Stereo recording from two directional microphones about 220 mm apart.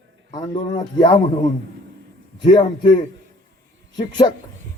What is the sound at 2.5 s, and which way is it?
A man's voice, 20° left (ahead or behind).